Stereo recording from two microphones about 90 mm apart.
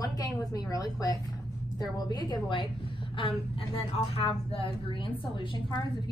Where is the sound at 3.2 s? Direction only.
85° left.